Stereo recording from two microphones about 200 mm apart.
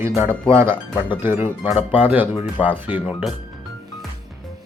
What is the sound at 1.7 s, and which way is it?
Speech, 30° left (ahead or behind).